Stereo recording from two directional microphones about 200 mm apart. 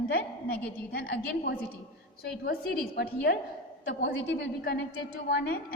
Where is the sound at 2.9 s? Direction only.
55° left (ahead or behind).